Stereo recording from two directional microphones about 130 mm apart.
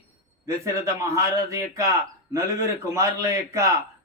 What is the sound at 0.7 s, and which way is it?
A man's voice, 25° right (ahead or behind).